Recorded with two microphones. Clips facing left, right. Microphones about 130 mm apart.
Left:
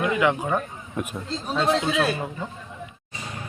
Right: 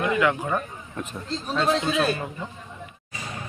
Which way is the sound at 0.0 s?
20° left (ahead or behind).